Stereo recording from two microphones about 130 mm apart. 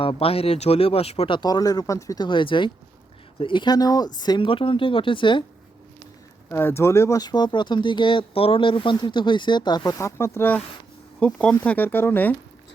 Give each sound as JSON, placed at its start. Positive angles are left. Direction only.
{"t": 0.0, "sound": "speech", "side_deg": 45}
{"t": 1.4, "sound": "speech", "side_deg": 30}
{"t": 6.5, "sound": "speech", "side_deg": 15}